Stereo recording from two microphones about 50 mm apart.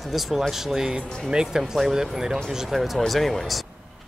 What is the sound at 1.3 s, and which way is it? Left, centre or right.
Speech, centre.